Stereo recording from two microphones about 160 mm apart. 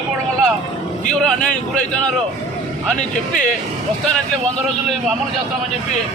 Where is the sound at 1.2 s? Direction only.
5° left (ahead or behind).